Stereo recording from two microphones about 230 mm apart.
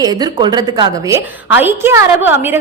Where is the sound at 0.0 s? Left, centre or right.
Centre.